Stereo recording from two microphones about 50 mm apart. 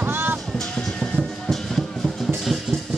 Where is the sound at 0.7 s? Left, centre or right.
Centre.